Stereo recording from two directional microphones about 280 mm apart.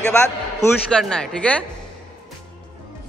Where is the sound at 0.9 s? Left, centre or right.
Centre.